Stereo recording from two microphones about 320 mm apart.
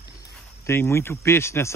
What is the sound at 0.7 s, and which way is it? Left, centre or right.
Speech, centre.